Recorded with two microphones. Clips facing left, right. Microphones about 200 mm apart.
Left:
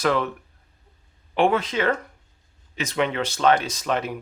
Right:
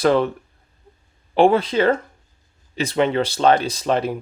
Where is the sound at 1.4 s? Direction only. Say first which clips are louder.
Right 6 dB; 35° right (ahead or behind).